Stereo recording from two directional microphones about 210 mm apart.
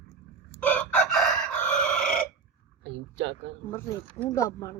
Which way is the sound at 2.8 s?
55° right (ahead or behind).